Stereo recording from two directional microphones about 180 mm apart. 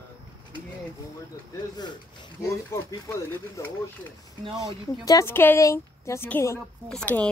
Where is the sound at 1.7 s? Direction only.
25° left (ahead or behind).